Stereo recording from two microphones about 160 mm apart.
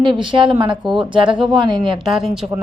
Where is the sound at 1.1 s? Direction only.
30° right (ahead or behind).